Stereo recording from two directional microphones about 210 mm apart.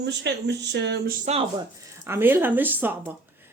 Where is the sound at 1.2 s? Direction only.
30° right (ahead or behind).